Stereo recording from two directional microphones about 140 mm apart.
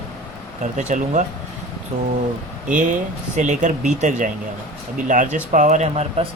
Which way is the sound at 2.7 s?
65° right (ahead or behind).